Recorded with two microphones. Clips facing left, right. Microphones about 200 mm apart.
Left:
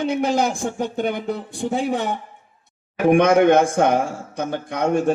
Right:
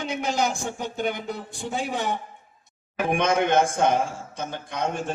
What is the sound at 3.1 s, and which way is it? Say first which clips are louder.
A man's voice: left 8 dB; 60° left (ahead or behind).